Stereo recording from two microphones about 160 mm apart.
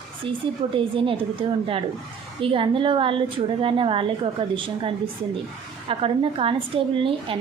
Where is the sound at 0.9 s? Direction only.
35° right (ahead or behind).